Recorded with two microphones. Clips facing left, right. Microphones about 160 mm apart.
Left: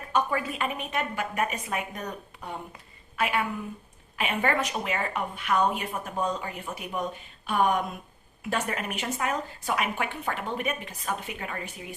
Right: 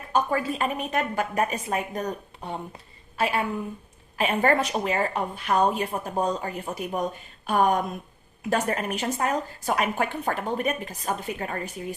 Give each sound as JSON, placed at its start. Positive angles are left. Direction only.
{"t": 0.1, "sound": "a woman's voice", "side_deg": -35}